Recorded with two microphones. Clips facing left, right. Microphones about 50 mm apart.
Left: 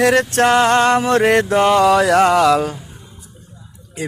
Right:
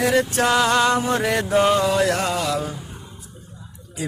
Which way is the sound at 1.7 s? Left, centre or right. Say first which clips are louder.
Left 7 dB; left.